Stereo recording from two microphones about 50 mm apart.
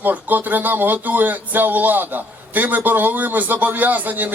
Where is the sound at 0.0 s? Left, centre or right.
Right.